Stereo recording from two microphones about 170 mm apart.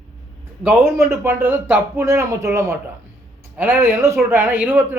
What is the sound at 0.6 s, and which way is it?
Speech, 10° right (ahead or behind).